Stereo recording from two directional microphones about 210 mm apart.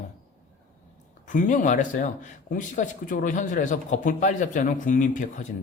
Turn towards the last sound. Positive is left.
turn(degrees=40)  # may be behind; listen again after turning